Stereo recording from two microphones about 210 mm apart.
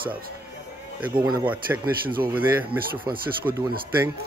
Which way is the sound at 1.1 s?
20° right (ahead or behind).